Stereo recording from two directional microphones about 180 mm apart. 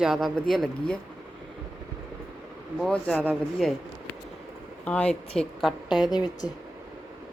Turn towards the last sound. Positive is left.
turn(degrees=25)  # may be behind; listen again after turning